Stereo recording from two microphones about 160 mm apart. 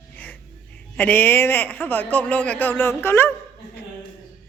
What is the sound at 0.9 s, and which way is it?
A man's voice, 10° left (ahead or behind).